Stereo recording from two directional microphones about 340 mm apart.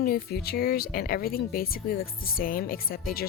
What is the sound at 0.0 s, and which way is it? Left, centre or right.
A woman's voice, left.